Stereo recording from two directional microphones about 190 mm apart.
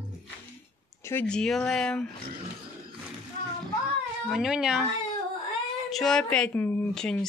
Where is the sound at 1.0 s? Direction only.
10° left (ahead or behind).